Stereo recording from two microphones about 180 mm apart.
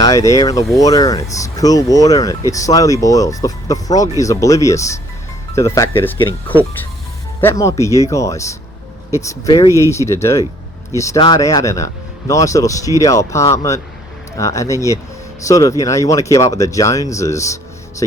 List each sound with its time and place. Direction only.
0.0 s speech: 20° left (ahead or behind)
7.4 s speech: 15° left (ahead or behind)